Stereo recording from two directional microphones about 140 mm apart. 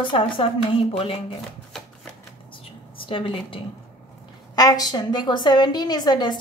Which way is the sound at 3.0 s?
40° left (ahead or behind).